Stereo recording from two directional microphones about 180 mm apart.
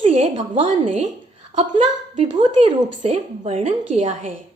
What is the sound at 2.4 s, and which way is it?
A woman's voice, 35° right (ahead or behind).